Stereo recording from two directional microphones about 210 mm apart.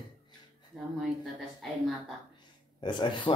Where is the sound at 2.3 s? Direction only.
20° left (ahead or behind).